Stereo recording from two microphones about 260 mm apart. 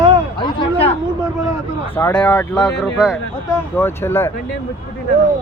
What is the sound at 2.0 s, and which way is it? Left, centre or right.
Speech, centre.